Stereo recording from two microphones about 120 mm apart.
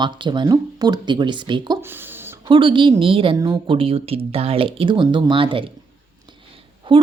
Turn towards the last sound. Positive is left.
turn(degrees=-45)  # may be behind; listen again after turning